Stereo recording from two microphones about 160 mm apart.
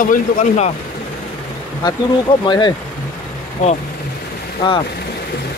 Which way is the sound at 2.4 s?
25° left (ahead or behind).